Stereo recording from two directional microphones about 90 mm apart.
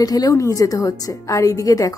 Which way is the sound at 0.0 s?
45° left (ahead or behind).